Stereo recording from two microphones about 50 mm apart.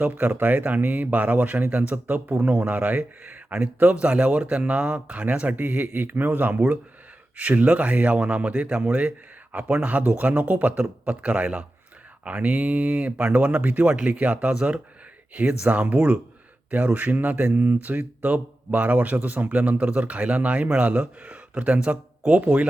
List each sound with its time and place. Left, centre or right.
0.0 s speech: right
15.6 s speech: right